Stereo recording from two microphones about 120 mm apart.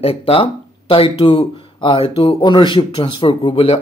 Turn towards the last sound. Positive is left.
turn(degrees=55)  # may be behind; listen again after turning